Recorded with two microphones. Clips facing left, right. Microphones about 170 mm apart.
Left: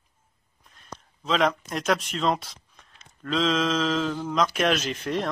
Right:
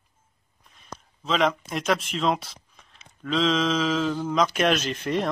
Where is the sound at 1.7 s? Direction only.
Centre (ahead or behind).